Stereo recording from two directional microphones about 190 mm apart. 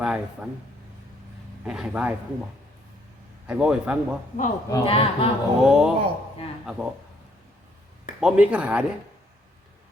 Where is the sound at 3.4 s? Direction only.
5° right (ahead or behind).